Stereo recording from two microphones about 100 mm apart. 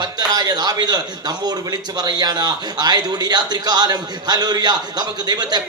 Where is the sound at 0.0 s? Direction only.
45° right (ahead or behind).